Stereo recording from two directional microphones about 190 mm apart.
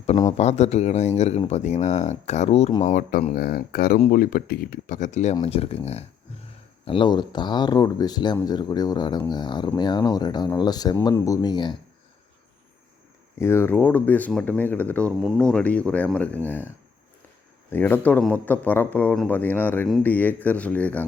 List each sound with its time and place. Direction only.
0.3 s speech: 35° left (ahead or behind)
2.8 s speech: 45° left (ahead or behind); by 11.8 s 25° left (ahead or behind)
13.4 s speech: 10° left (ahead or behind)